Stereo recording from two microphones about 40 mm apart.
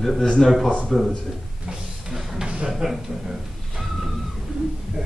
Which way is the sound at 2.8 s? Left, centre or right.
Centre.